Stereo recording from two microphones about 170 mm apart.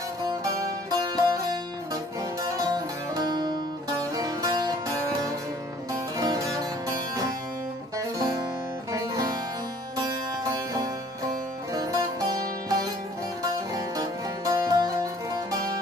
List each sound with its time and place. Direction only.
0.3 s music: 20° right (ahead or behind)
2.4 s music: 20° right (ahead or behind)